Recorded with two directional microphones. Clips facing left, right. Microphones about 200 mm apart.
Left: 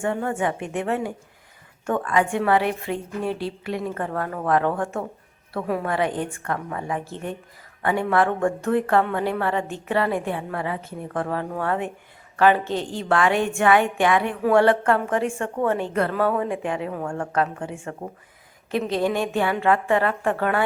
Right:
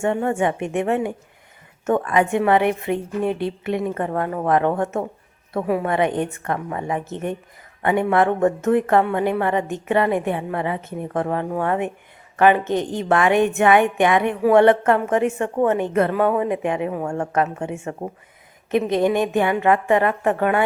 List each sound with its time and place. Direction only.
0.0 s a woman's voice: 20° right (ahead or behind)